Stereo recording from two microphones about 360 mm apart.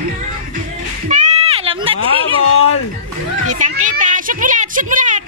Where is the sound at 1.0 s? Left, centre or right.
Centre.